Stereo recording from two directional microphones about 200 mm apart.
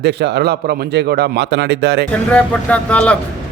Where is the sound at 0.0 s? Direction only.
55° right (ahead or behind).